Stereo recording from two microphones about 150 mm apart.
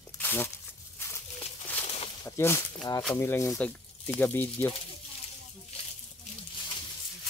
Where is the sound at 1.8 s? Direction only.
45° left (ahead or behind).